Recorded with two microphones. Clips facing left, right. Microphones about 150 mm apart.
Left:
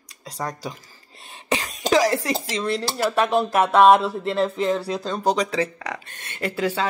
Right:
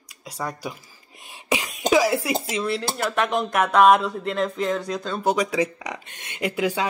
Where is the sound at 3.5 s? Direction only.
30° left (ahead or behind).